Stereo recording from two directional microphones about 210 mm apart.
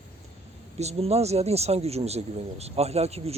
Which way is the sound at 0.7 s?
30° right (ahead or behind).